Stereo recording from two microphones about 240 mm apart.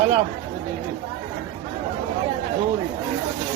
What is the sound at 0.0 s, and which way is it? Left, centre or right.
Speech, right.